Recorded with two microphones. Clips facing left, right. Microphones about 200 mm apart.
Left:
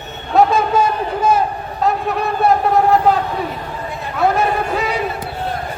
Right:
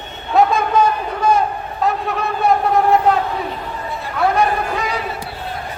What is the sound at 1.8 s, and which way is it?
Vehicle, centre (ahead or behind).